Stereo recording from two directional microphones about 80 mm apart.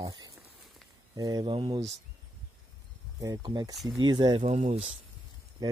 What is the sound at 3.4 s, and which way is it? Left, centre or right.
Speech, right.